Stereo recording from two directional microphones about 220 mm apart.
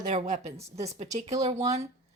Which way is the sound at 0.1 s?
30° right (ahead or behind).